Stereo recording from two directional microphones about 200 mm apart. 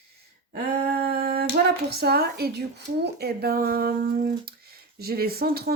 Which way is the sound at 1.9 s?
50° right (ahead or behind).